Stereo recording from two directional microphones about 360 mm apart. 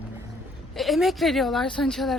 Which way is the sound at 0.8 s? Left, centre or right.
Centre.